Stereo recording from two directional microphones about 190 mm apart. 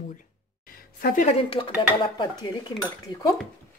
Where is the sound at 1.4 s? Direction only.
30° left (ahead or behind).